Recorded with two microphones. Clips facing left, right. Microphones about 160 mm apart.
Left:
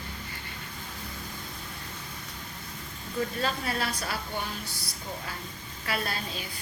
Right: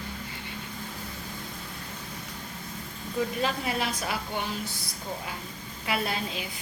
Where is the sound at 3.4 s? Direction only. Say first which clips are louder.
Right 2 dB; 15° right (ahead or behind).